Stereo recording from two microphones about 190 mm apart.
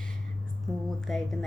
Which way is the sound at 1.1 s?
Centre (ahead or behind).